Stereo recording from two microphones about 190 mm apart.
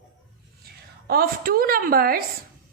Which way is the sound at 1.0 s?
50° right (ahead or behind).